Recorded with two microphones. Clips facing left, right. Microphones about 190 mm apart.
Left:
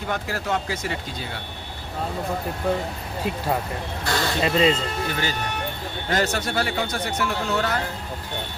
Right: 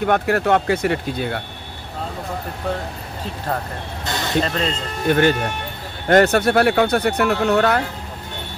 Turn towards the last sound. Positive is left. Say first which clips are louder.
# right 8 dB
turn(degrees=-60)  # may be behind; listen again after turning